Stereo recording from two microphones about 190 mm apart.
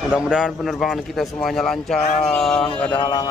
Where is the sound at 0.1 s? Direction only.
5° right (ahead or behind).